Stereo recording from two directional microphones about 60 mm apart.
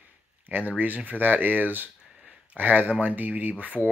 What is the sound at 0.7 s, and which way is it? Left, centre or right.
Speech, right.